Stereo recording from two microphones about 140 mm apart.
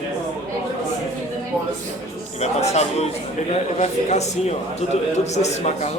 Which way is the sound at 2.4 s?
50° left (ahead or behind).